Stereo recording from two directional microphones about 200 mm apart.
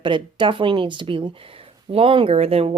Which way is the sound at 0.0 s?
25° right (ahead or behind).